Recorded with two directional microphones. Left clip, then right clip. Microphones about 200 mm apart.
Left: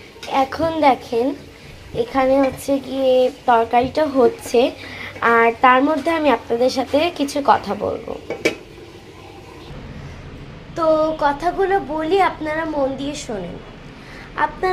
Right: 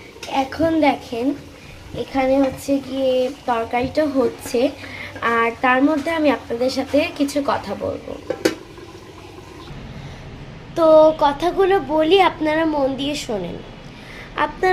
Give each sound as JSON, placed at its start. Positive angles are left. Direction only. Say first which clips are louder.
{"t": 0.3, "sound": "speech", "louder": "even", "side_deg": 15}
{"t": 10.8, "sound": "a woman's voice", "louder": "right 5 dB", "side_deg": -25}
{"t": 14.3, "sound": "a woman's voice", "louder": "even", "side_deg": -25}